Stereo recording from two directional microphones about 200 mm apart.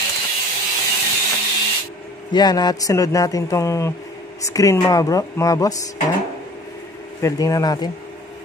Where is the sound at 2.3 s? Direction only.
20° left (ahead or behind).